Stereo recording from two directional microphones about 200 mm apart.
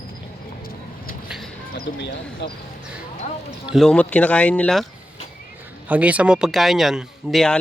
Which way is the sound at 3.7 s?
5° left (ahead or behind).